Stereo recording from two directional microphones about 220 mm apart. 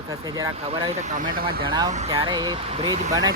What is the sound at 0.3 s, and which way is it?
Speech, 15° right (ahead or behind).